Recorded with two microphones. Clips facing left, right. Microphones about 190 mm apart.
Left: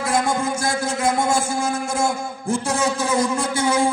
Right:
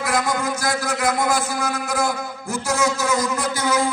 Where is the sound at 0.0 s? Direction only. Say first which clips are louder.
Left 1 dB; 30° left (ahead or behind).